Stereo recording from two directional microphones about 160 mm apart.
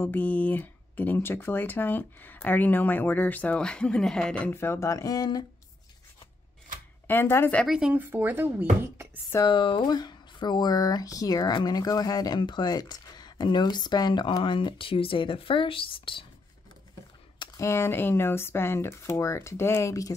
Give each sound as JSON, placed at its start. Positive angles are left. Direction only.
{"t": 0.0, "sound": "speech", "side_deg": 10}
{"t": 7.1, "sound": "speech", "side_deg": 15}
{"t": 7.6, "sound": "speech", "side_deg": -5}
{"t": 9.3, "sound": "speech", "side_deg": 25}
{"t": 17.4, "sound": "speech", "side_deg": 20}